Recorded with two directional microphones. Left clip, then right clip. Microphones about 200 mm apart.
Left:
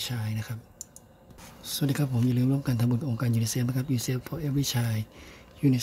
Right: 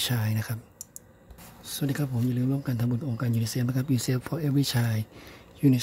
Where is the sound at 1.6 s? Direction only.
Centre (ahead or behind).